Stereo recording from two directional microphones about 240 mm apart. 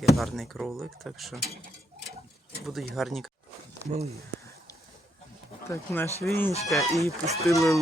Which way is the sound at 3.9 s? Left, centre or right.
Right.